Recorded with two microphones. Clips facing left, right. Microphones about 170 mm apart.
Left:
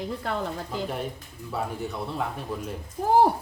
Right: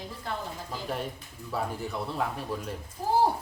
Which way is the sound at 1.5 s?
Centre (ahead or behind).